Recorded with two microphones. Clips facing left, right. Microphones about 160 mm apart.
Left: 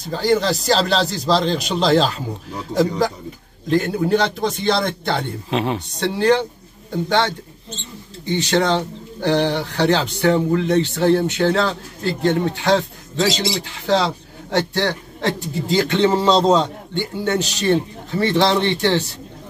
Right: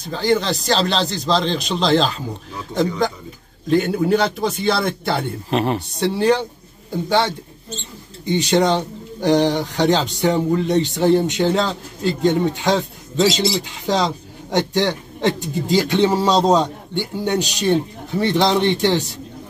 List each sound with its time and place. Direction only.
0.1 s a man's voice: centre (ahead or behind)
3.7 s a man's voice: centre (ahead or behind)